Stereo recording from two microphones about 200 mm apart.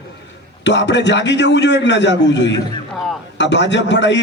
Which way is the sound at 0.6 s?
60° left (ahead or behind).